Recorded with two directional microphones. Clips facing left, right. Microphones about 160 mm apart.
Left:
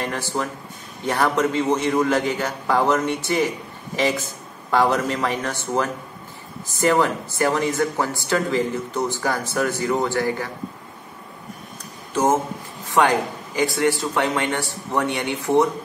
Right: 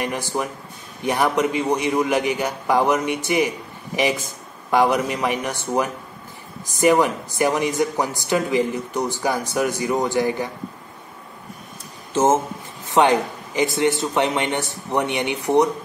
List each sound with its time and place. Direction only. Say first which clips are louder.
0.0 s a man's voice: right 1 dB; 15° right (ahead or behind)
12.1 s a man's voice: right 2 dB; 25° right (ahead or behind)